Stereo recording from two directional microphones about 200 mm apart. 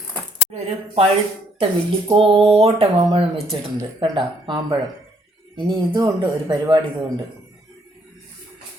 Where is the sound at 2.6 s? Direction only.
30° right (ahead or behind).